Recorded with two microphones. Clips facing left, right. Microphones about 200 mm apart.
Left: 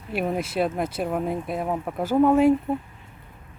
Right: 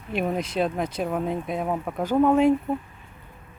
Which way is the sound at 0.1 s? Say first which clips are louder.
Even; 5° left (ahead or behind).